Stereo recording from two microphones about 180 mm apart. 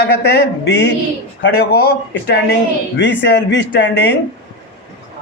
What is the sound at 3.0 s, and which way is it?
A man's voice, 75° left (ahead or behind).